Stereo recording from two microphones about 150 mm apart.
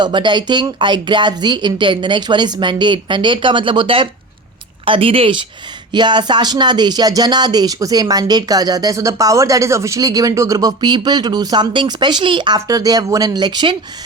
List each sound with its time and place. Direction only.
0.0 s speech: 30° right (ahead or behind)